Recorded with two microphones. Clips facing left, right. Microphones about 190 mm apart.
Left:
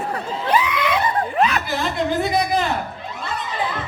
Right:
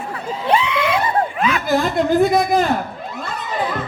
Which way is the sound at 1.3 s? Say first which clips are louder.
Left 1 dB; 40° left (ahead or behind).